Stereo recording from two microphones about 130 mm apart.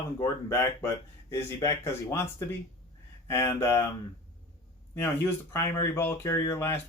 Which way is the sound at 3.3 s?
20° left (ahead or behind).